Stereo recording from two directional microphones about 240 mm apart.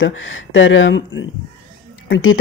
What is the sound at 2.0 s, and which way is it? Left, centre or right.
Speech, left.